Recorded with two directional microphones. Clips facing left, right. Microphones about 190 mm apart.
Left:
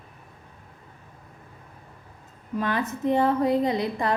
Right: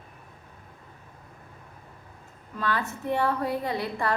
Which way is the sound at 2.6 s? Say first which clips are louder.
Left 3 dB; 20° left (ahead or behind).